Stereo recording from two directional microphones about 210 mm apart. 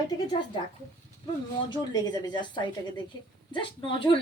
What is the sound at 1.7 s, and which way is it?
A woman's voice, 20° left (ahead or behind).